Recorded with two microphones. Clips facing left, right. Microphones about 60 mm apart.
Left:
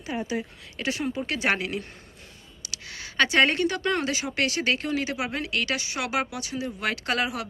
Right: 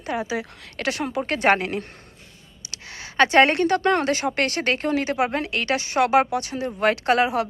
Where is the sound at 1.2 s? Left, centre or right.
Right.